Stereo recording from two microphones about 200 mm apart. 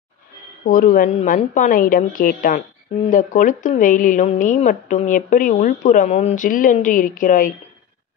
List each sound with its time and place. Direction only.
0.7 s a woman's voice: 45° left (ahead or behind)